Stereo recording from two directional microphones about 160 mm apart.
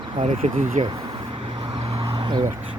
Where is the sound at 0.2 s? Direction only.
45° right (ahead or behind).